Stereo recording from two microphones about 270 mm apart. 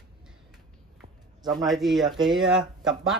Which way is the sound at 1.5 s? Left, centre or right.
Centre.